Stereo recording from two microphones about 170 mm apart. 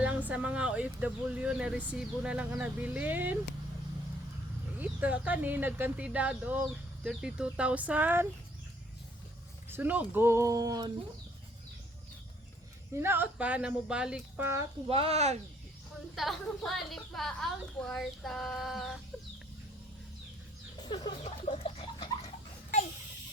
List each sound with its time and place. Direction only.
0.0 s speech: 10° right (ahead or behind)
4.8 s speech: 10° right (ahead or behind)
9.6 s speech: 10° right (ahead or behind)
12.9 s speech: 15° right (ahead or behind)
14.8 s speech: 35° right (ahead or behind)
16.1 s a woman's voice: centre (ahead or behind)
20.7 s a sound: 25° left (ahead or behind)
21.2 s a sound: 40° left (ahead or behind)